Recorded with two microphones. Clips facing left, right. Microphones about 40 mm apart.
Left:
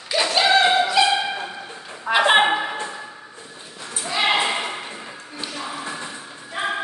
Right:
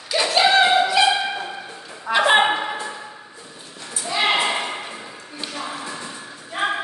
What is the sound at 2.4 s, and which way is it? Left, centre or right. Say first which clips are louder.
Music: even; centre.